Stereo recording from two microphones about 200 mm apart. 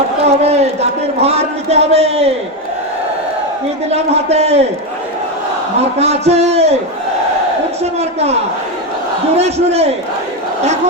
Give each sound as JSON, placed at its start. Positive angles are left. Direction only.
{"t": 0.2, "sound": "speech", "side_deg": -30}
{"t": 3.9, "sound": "a man's voice", "side_deg": -30}
{"t": 6.0, "sound": "a man's voice", "side_deg": -30}
{"t": 7.9, "sound": "a man's voice", "side_deg": -30}
{"t": 9.4, "sound": "a man's voice", "side_deg": -30}